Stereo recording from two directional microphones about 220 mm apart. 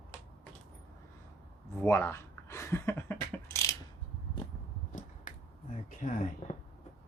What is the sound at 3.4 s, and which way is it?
Mechanisms, 15° left (ahead or behind).